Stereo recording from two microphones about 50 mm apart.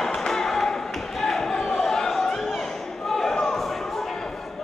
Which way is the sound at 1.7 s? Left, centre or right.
Centre.